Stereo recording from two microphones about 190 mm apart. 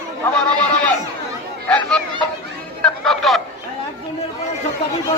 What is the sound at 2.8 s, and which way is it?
Music, 5° left (ahead or behind).